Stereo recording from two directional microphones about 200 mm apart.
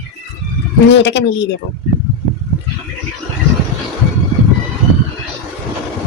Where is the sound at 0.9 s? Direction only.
65° left (ahead or behind).